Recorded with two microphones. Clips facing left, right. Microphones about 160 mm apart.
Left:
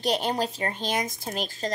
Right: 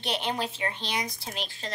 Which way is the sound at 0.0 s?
40° left (ahead or behind).